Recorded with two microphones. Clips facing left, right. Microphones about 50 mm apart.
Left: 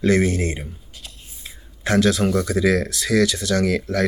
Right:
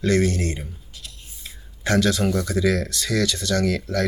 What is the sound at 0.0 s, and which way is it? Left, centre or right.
Speech, centre.